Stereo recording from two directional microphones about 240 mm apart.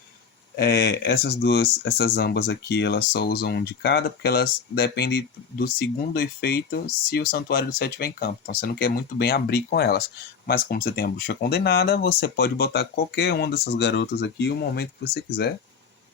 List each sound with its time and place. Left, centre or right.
0.5 s speech: left